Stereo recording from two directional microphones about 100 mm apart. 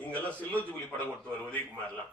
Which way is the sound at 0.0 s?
15° left (ahead or behind).